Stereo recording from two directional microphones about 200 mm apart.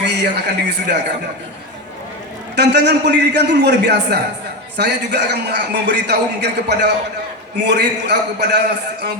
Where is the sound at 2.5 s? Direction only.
60° right (ahead or behind).